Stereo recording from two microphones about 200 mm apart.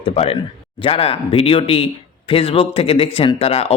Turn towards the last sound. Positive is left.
turn(degrees=30)  # may be behind; listen again after turning